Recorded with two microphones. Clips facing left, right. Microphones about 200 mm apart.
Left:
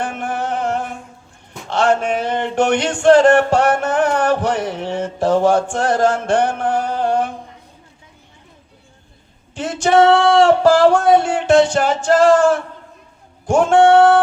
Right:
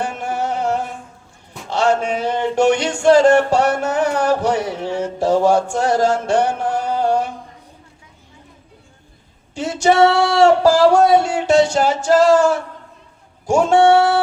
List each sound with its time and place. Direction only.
0.0 s music: 55° left (ahead or behind)
9.6 s a sound: 55° left (ahead or behind)
12.0 s female singing: 55° left (ahead or behind)